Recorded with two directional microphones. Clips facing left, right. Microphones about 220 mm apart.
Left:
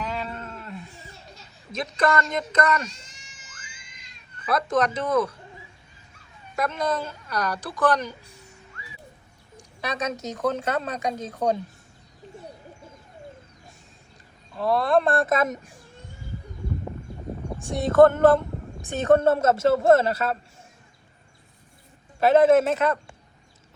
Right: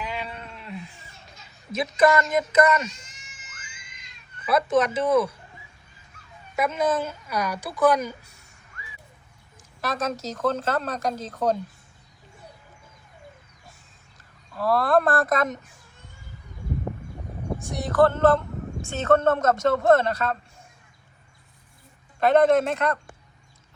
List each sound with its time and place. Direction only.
0.0 s sheep: centre (ahead or behind)
1.7 s a woman's voice: 5° right (ahead or behind)
3.2 s music: 30° left (ahead or behind)
4.4 s a woman's voice: 5° right (ahead or behind)
6.6 s a woman's voice: 5° right (ahead or behind)
9.6 s speech: centre (ahead or behind)
14.8 s speech: centre (ahead or behind)
17.6 s a man's voice: 25° left (ahead or behind); by 20.3 s 5° left (ahead or behind)
22.2 s speech: 5° left (ahead or behind)